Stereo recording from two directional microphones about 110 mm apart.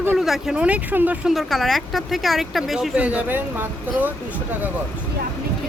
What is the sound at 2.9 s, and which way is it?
Speech, 10° right (ahead or behind).